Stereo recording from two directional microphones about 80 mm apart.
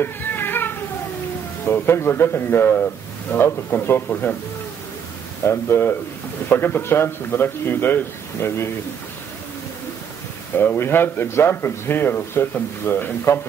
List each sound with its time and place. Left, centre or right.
0.0 s a sound: left
1.7 s a man's voice: left
4.1 s a man's voice: centre
5.4 s a man's voice: left
10.6 s a man's voice: left